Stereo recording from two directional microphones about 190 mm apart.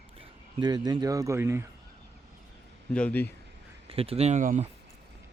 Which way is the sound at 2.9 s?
10° left (ahead or behind).